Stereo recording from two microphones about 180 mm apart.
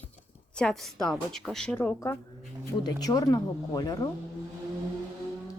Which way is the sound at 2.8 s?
20° left (ahead or behind).